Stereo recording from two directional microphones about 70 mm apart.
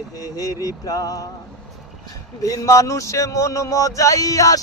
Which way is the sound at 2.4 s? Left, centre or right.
Left.